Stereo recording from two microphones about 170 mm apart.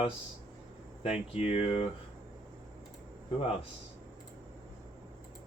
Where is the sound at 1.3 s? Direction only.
35° left (ahead or behind).